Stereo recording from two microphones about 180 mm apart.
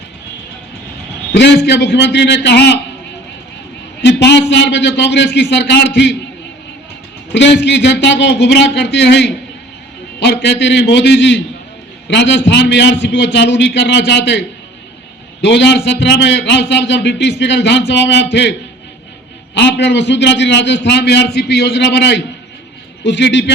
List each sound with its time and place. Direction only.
1.3 s a man's voice: 70° left (ahead or behind)
4.0 s a man's voice: 75° left (ahead or behind)
7.3 s a man's voice: 80° left
15.4 s a man's voice: 75° left (ahead or behind)
19.5 s a man's voice: 75° left (ahead or behind)